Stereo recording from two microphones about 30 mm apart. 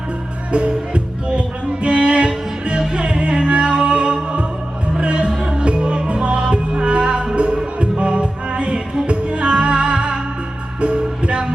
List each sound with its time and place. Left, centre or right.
0.5 s music: right